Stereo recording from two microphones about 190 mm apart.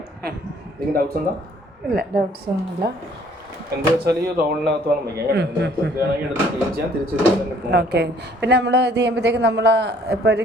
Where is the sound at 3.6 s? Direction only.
55° right (ahead or behind).